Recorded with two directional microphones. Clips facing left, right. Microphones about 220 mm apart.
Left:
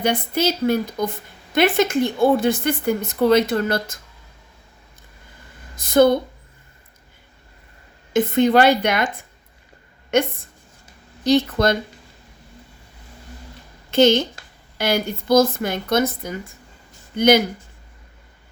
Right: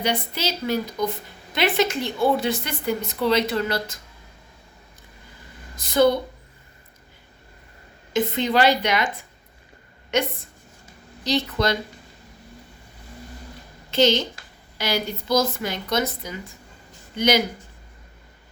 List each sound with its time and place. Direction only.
0.0 s speech: 50° left (ahead or behind)
5.8 s speech: 50° left (ahead or behind)
8.1 s speech: 50° left (ahead or behind)
11.2 s speech: 50° left (ahead or behind)
13.9 s speech: 50° left (ahead or behind)